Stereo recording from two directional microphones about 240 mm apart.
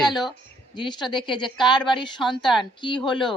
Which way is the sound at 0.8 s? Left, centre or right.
Centre.